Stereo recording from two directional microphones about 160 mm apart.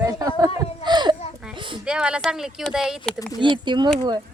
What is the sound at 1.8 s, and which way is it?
Speech, 5° right (ahead or behind).